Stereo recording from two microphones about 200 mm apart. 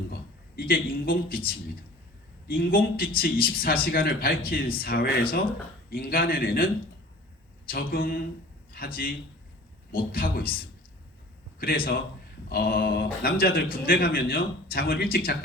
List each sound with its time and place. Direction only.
0.1 s a man's voice: 50° left (ahead or behind)
2.5 s a man's voice: 45° left (ahead or behind)
7.7 s a man's voice: 45° left (ahead or behind)
12.5 s a man's voice: 50° left (ahead or behind)